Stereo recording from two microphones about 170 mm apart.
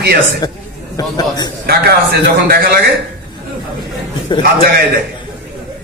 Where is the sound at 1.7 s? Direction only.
65° right (ahead or behind).